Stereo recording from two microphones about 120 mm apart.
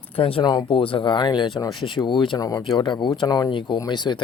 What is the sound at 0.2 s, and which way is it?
Speech, 50° left (ahead or behind).